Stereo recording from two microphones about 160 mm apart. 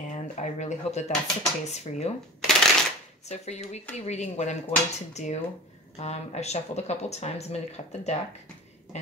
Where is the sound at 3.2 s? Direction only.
45° left (ahead or behind).